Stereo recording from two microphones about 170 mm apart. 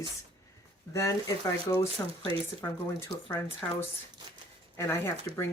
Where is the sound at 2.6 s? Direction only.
15° left (ahead or behind).